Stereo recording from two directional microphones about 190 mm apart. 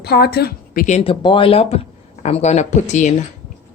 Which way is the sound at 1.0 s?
30° left (ahead or behind).